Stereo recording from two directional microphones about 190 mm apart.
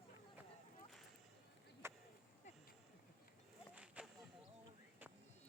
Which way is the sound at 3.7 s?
5° right (ahead or behind).